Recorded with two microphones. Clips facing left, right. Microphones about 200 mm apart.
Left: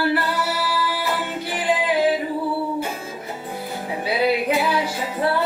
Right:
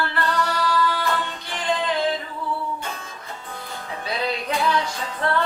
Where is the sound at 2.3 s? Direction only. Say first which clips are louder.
Left 6 dB; 35° left (ahead or behind).